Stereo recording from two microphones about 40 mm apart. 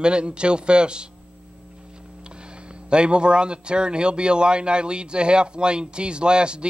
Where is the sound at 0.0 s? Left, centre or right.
Right.